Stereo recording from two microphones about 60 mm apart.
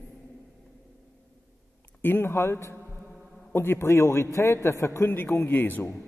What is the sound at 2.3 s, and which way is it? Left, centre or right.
A man's voice, left.